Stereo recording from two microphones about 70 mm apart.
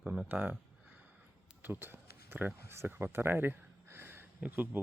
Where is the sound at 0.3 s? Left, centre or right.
Right.